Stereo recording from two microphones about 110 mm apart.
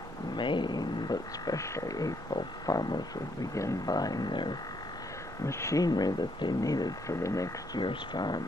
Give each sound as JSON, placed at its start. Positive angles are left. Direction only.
{"t": 0.4, "sound": "speech", "side_deg": 45}
{"t": 5.4, "sound": "speech", "side_deg": 25}
{"t": 7.8, "sound": "speech", "side_deg": 45}